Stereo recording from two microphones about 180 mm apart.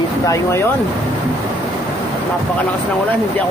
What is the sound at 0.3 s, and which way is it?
Speech, 15° left (ahead or behind).